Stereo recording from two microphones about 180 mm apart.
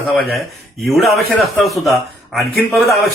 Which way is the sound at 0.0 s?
Centre (ahead or behind).